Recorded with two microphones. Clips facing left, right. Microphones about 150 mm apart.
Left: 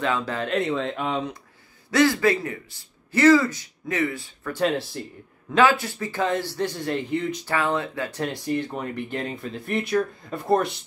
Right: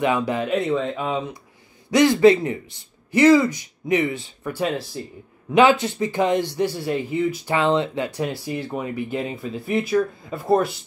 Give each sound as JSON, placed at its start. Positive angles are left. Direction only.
{"t": 0.0, "sound": "a man's voice", "side_deg": -15}
{"t": 0.5, "sound": "speech", "side_deg": -5}
{"t": 1.9, "sound": "a man's voice", "side_deg": -20}
{"t": 4.6, "sound": "speech", "side_deg": 0}
{"t": 5.5, "sound": "a man's voice", "side_deg": -20}
{"t": 7.4, "sound": "speech", "side_deg": -20}
{"t": 8.2, "sound": "speech", "side_deg": -5}